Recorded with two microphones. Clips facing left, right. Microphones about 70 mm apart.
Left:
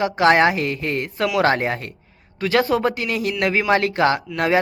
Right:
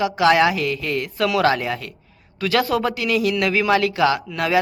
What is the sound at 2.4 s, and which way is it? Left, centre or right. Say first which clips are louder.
Speech: left 1 dB; left.